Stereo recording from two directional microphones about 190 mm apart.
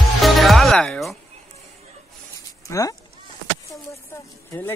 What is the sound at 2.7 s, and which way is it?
Speech, 15° left (ahead or behind).